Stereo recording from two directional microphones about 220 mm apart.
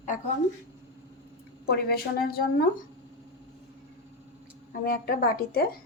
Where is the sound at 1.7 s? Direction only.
45° left (ahead or behind).